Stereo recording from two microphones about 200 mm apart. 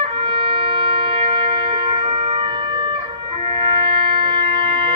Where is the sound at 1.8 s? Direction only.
25° right (ahead or behind).